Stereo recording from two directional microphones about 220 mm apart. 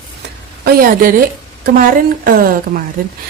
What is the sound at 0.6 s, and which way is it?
Speech, 40° right (ahead or behind).